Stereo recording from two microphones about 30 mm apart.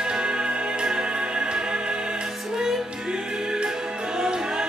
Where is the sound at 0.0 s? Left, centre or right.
Right.